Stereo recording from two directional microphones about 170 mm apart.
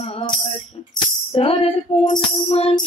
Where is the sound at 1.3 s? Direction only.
35° left (ahead or behind).